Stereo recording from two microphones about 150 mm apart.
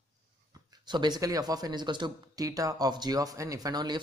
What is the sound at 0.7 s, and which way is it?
Speech, 30° right (ahead or behind).